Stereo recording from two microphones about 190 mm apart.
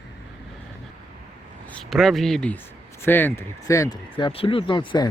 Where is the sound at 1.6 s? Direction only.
5° left (ahead or behind).